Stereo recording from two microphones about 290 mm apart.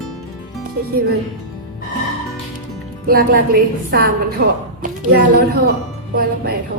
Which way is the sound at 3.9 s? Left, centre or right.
Right.